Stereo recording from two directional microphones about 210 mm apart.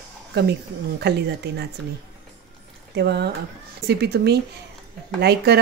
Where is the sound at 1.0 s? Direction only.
50° right (ahead or behind).